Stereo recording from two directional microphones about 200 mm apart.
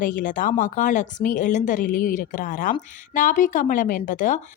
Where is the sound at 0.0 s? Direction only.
40° left (ahead or behind).